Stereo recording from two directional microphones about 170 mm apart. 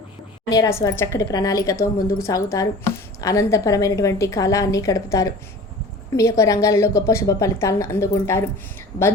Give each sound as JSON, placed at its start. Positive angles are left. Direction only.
{"t": 0.5, "sound": "a woman's voice", "side_deg": 20}